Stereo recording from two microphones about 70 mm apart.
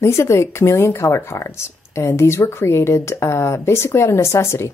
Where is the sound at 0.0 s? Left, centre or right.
Left.